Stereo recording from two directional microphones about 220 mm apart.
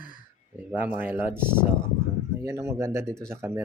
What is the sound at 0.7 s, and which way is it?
Speech, 10° right (ahead or behind).